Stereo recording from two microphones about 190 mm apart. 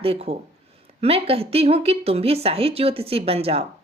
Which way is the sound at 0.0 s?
30° right (ahead or behind).